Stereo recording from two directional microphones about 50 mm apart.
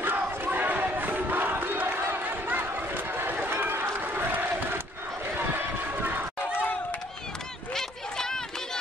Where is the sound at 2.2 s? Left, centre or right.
Right.